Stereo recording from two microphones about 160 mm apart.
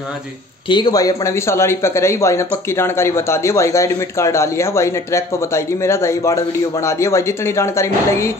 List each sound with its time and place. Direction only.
0.7 s speech: 25° left (ahead or behind)